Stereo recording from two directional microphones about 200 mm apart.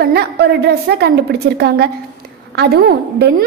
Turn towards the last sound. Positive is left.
turn(degrees=-55)  # may be behind; listen again after turning